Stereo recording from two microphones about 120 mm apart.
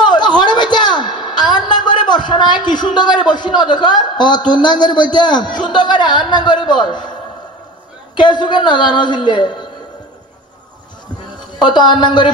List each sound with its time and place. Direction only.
0.0 s a sound: 40° left (ahead or behind)
8.2 s a man's voice: 40° left (ahead or behind)
11.7 s a man's voice: 40° left (ahead or behind)